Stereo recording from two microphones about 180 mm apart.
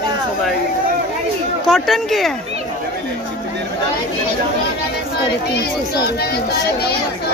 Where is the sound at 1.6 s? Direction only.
Centre (ahead or behind).